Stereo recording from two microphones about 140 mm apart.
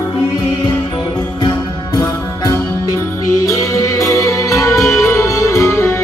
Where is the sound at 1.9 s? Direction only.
25° left (ahead or behind).